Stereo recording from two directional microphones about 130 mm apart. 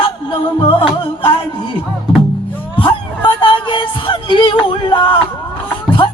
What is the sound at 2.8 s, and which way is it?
Music, 40° left (ahead or behind).